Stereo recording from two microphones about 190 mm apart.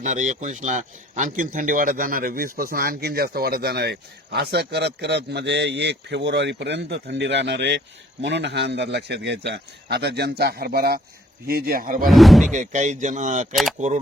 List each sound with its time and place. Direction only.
0.0 s speech: 40° right (ahead or behind)
12.0 s speech: centre (ahead or behind)
12.5 s speech: 40° right (ahead or behind)